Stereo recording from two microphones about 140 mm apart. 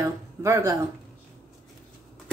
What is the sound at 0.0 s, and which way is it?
Speech, 20° right (ahead or behind).